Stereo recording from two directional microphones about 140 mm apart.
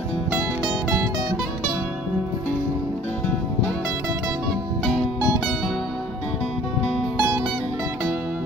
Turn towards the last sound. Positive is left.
turn(degrees=-15)  # may be behind; listen again after turning